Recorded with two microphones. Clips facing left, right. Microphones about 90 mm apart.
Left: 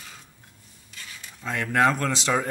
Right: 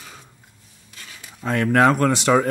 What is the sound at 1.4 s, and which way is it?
Speech, 55° right (ahead or behind).